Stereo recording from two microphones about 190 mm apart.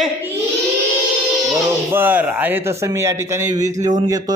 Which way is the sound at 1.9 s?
10° right (ahead or behind).